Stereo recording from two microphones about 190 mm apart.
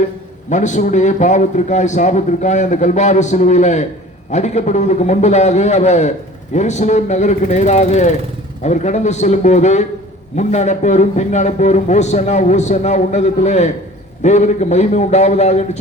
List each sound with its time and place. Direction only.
0.5 s a man's voice: 40° left (ahead or behind)